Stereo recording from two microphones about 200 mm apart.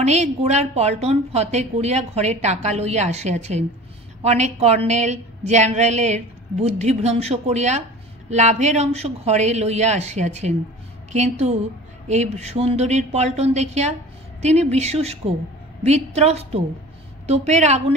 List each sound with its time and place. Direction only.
0.0 s a woman's voice: 35° right (ahead or behind)